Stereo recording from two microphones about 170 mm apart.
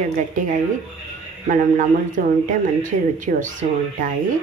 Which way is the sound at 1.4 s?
50° right (ahead or behind).